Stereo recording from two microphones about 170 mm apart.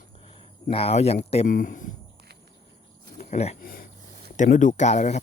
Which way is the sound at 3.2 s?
40° left (ahead or behind).